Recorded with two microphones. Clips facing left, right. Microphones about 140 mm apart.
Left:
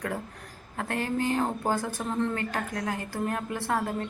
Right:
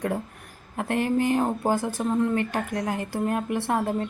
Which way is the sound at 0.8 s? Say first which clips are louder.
Right 5 dB; 15° right (ahead or behind).